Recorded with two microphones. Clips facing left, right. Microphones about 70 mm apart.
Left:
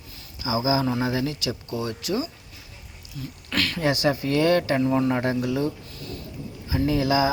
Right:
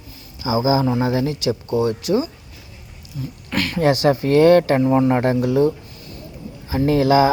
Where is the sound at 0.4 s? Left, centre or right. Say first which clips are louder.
Right 5 dB; right.